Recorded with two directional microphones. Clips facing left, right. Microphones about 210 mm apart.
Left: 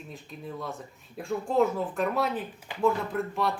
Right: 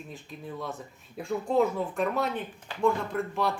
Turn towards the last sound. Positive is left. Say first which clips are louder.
# even
turn(degrees=0)  # may be behind; listen again after turning